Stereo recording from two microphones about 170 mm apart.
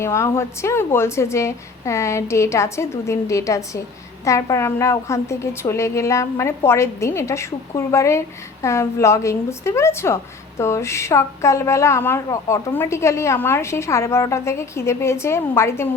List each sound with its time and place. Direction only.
0.0 s a woman's voice: 15° left (ahead or behind)